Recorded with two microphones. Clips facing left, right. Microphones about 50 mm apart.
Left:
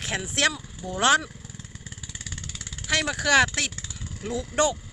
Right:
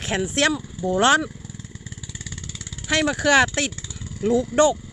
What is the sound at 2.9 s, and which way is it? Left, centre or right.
Speech, centre.